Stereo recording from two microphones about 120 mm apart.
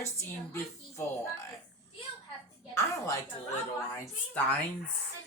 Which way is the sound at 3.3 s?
50° left (ahead or behind).